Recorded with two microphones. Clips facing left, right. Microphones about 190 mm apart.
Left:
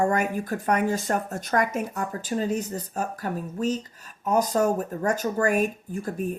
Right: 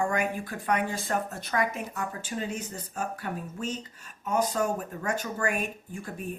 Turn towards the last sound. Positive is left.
turn(degrees=40)  # may be behind; listen again after turning